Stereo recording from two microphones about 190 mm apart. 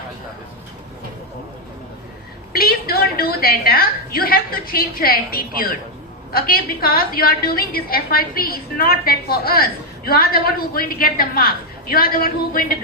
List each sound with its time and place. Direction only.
2.5 s a woman's voice: 50° left (ahead or behind)